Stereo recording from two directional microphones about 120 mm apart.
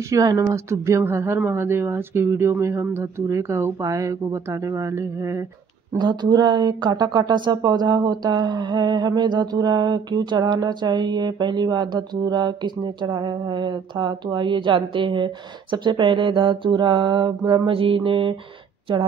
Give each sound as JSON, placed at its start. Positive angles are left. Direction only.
{"t": 0.1, "sound": "a woman's voice", "side_deg": -30}
{"t": 5.9, "sound": "speech", "side_deg": -35}
{"t": 17.6, "sound": "mantra", "side_deg": -50}